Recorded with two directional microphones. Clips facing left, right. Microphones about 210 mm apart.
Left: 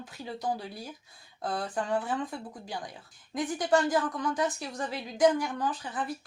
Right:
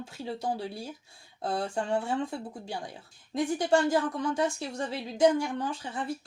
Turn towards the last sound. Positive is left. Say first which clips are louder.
# left 1 dB
turn(degrees=-25)  # may be behind; listen again after turning